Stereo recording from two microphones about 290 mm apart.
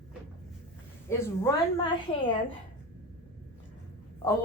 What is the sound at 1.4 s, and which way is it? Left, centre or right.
A woman's voice, centre.